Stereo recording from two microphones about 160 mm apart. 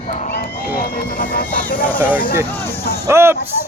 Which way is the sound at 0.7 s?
60° left (ahead or behind).